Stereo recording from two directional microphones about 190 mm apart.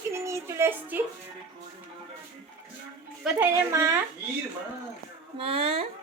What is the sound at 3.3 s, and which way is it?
Speech, 10° right (ahead or behind).